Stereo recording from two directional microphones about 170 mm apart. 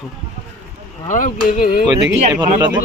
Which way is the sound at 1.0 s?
50° left (ahead or behind).